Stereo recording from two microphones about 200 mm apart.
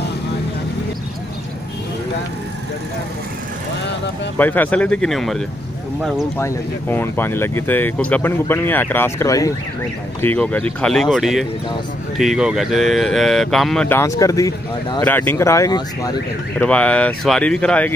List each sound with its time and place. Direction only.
4.4 s speech: 10° left (ahead or behind)
6.3 s speech: 15° left (ahead or behind)
16.5 s speech: 5° left (ahead or behind)